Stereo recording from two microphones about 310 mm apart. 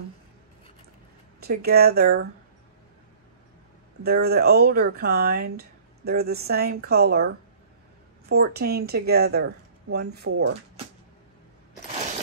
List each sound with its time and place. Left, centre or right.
1.4 s speech: right
4.0 s speech: right